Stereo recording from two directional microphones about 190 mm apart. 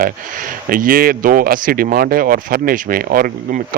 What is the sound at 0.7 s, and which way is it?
Speech, 45° right (ahead or behind).